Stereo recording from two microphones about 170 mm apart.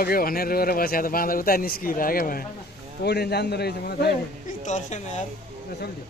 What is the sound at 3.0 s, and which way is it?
A man's voice, 75° left (ahead or behind).